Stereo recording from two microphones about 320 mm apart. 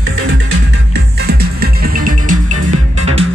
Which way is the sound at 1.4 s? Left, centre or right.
Right.